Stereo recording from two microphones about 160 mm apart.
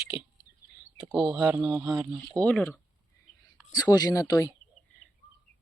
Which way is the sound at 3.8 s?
25° left (ahead or behind).